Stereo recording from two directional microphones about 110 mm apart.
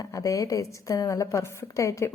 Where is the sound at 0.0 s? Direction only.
30° left (ahead or behind).